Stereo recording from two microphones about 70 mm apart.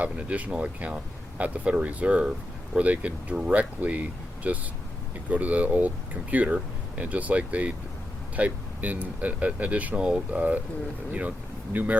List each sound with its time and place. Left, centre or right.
0.0 s speech: centre
11.7 s speech: right